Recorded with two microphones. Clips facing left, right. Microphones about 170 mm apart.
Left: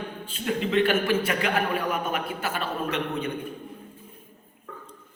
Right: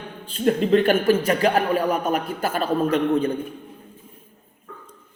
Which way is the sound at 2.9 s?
35° right (ahead or behind).